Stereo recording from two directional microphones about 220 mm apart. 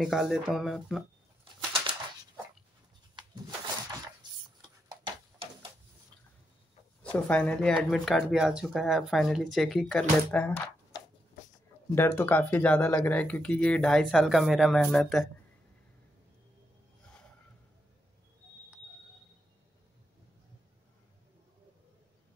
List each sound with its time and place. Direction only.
0.0 s speech: centre (ahead or behind)
4.6 s a sound: 25° right (ahead or behind)
7.0 s speech: 5° left (ahead or behind)
11.9 s speech: 10° left (ahead or behind)